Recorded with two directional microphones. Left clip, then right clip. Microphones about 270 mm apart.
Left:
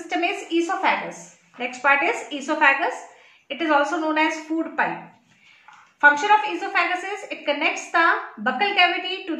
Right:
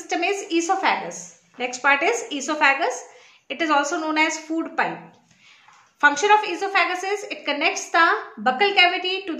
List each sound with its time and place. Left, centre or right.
0.1 s a woman's voice: right
5.9 s a woman's voice: right